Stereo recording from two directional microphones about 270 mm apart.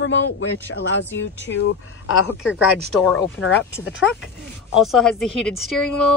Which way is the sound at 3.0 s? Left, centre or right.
Centre.